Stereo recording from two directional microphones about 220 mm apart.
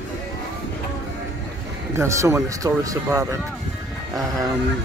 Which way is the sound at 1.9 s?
15° right (ahead or behind).